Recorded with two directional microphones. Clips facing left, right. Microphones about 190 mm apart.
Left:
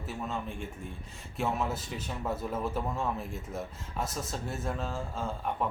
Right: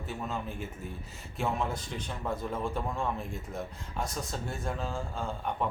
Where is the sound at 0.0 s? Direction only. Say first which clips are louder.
Even; centre (ahead or behind).